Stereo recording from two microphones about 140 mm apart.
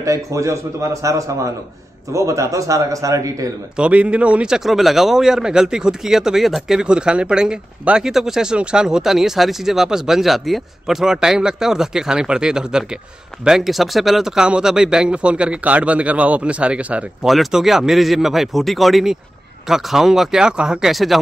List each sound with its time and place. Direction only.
0.0 s a man's voice: 20° right (ahead or behind)
3.7 s speech: 10° right (ahead or behind)